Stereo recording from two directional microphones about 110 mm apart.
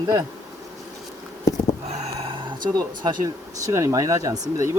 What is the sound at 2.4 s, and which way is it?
Speech, 40° right (ahead or behind).